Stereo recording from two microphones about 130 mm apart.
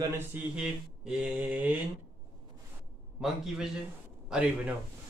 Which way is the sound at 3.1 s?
5° right (ahead or behind).